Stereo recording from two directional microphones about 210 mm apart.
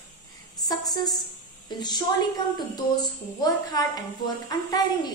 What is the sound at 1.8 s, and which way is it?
A woman's voice, 20° left (ahead or behind).